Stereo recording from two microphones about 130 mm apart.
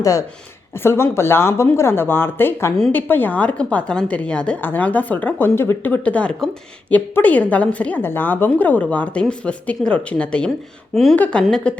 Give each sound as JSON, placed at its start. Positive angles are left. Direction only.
{"t": 0.0, "sound": "speech", "side_deg": 25}
{"t": 2.7, "sound": "a woman's voice", "side_deg": 5}